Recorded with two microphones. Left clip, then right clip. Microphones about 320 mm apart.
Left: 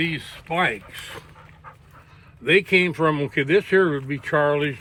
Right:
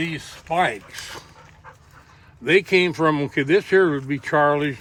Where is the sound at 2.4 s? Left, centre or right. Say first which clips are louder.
Even; right.